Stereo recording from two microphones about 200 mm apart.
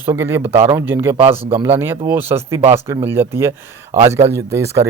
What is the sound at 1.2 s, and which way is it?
Speech, 30° right (ahead or behind).